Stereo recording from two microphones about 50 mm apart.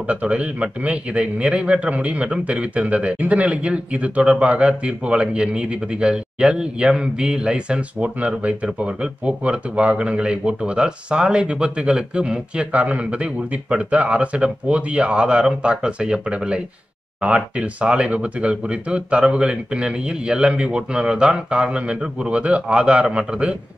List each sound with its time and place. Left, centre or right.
0.0 s a man's voice: right